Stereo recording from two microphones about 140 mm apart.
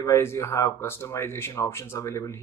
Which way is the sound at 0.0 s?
20° left (ahead or behind).